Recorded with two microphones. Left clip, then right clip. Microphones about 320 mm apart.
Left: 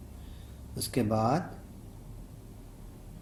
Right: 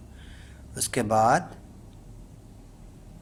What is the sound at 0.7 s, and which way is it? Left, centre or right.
Speech, right.